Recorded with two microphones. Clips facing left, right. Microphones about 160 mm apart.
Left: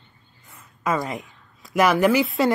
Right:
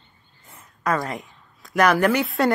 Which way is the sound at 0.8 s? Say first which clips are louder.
Even; centre (ahead or behind).